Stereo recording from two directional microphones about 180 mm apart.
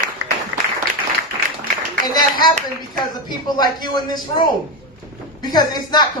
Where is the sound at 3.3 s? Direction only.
25° left (ahead or behind).